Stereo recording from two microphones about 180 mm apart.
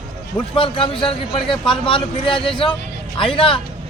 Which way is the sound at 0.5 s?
30° left (ahead or behind).